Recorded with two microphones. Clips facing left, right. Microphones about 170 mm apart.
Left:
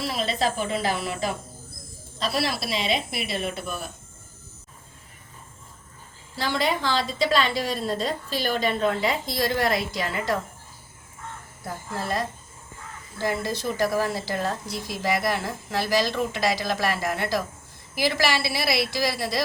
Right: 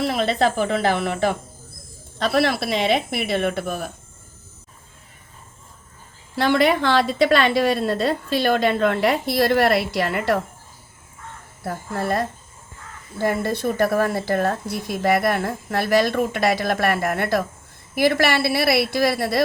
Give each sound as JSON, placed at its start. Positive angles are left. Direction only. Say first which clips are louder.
{"t": 0.0, "sound": "a woman's voice", "louder": "right 6 dB", "side_deg": -60}
{"t": 6.3, "sound": "a woman's voice", "louder": "right 8 dB", "side_deg": -60}
{"t": 11.6, "sound": "a woman's voice", "louder": "right 6 dB", "side_deg": -60}